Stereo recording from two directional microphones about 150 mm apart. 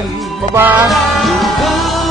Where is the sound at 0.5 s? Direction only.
10° right (ahead or behind).